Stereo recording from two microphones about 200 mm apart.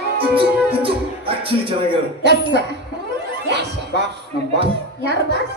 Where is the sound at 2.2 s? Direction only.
60° right (ahead or behind).